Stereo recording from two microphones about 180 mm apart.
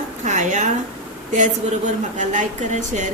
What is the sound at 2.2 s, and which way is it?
Speech, 45° right (ahead or behind).